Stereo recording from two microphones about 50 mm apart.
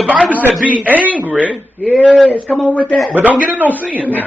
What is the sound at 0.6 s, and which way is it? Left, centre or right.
Speech, right.